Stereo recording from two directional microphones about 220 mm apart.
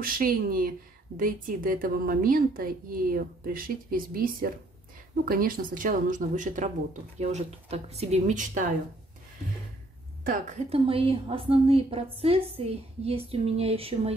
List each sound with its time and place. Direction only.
0.0 s a woman's voice: 40° right (ahead or behind)
10.2 s a woman's voice: 40° right (ahead or behind)
10.9 s a woman's voice: 25° right (ahead or behind)